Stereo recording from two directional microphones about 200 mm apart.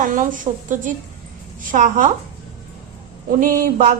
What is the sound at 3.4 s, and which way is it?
Speech, 40° right (ahead or behind).